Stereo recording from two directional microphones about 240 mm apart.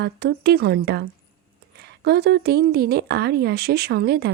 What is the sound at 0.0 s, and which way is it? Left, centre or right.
Speech, right.